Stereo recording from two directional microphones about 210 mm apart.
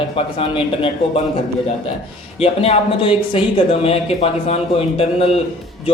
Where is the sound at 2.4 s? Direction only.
30° left (ahead or behind).